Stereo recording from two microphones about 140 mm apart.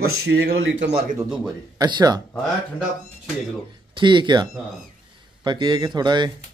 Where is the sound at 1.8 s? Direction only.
30° right (ahead or behind).